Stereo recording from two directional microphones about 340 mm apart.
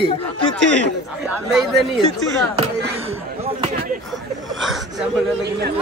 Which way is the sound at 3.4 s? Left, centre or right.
Centre.